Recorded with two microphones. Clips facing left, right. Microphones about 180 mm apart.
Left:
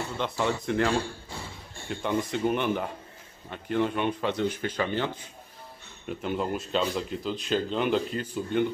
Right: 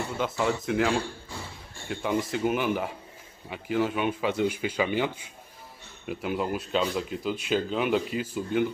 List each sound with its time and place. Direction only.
0.2 s speech: 5° right (ahead or behind)